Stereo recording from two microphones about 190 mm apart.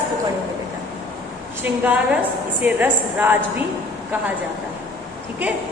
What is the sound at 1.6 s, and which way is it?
A woman's voice, 5° right (ahead or behind).